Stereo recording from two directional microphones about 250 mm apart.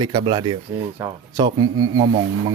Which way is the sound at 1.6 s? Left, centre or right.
Right.